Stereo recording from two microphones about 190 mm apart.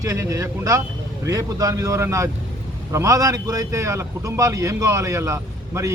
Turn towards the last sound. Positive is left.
turn(degrees=-15)  # may be behind; listen again after turning